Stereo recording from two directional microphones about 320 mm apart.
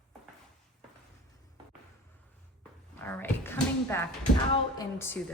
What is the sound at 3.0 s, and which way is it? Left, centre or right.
A woman's voice, centre.